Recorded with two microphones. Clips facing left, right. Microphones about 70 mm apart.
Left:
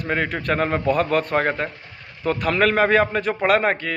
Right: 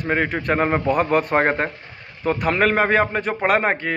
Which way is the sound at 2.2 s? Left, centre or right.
Centre.